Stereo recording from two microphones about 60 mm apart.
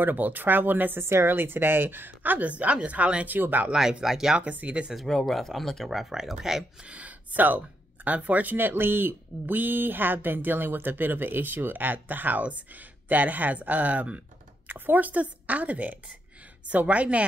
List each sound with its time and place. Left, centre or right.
0.0 s a woman's voice: right
3.7 s speech: centre
4.4 s a woman's voice: right
4.9 s speech: centre
6.9 s a woman's voice: right